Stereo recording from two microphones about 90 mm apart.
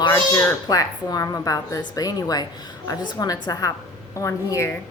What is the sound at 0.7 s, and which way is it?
A woman's voice, 40° left (ahead or behind).